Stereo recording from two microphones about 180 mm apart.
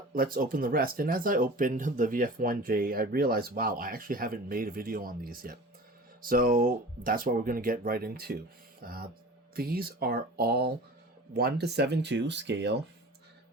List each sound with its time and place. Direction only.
0.1 s speech: 55° right (ahead or behind); by 12.8 s 75° right (ahead or behind)